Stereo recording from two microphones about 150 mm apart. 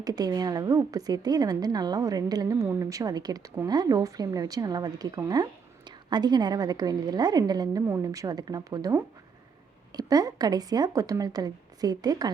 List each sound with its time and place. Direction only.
0.0 s a woman's voice: 25° right (ahead or behind)